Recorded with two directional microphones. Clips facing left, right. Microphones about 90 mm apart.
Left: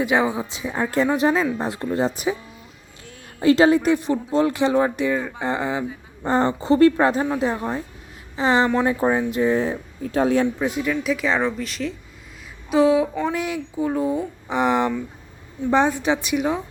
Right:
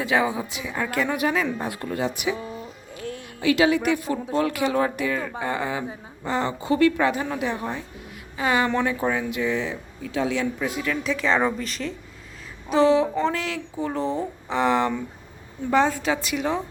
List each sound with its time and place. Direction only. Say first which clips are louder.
0.0 s speech: left 2 dB; 20° left (ahead or behind)
6.2 s speech: left 5 dB; 35° left (ahead or behind)
8.4 s speech: left 3 dB; 25° left (ahead or behind); by 10.4 s 45° left (ahead or behind)
10.4 s speech: left 4 dB; 25° left (ahead or behind)
10.8 s speech: right 1 dB; 5° left (ahead or behind)